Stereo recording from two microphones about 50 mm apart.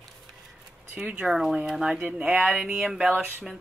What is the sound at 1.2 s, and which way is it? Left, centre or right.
Speech, centre.